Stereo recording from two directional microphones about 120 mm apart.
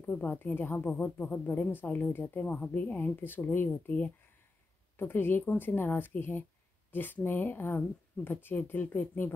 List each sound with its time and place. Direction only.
0.0 s speech: 15° left (ahead or behind)